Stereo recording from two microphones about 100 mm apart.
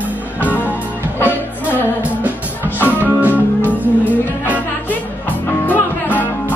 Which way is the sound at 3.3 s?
15° left (ahead or behind).